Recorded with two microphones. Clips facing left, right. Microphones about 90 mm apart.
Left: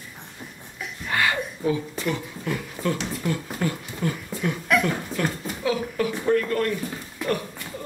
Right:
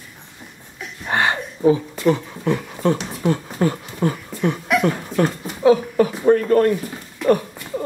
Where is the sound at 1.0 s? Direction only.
30° right (ahead or behind).